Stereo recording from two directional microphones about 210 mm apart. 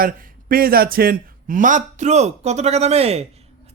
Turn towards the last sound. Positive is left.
turn(degrees=-30)  # may be behind; listen again after turning